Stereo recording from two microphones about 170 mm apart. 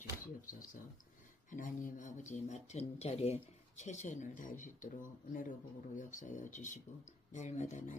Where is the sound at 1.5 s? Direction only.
50° left (ahead or behind).